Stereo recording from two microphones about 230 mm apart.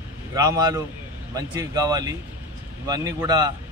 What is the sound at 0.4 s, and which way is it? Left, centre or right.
Speech, centre.